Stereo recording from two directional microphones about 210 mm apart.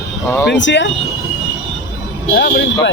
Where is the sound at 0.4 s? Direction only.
60° left (ahead or behind).